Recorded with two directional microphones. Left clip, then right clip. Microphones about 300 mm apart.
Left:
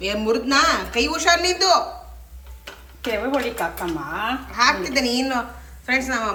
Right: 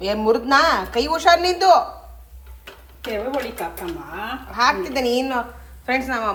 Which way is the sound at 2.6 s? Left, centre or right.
Centre.